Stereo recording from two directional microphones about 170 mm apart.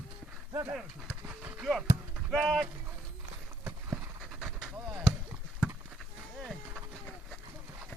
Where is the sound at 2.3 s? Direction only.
Centre (ahead or behind).